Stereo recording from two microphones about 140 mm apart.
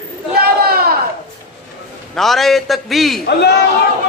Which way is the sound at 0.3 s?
90° right.